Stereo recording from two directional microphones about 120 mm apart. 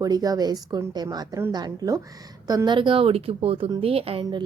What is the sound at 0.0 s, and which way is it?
A woman's voice, 30° right (ahead or behind).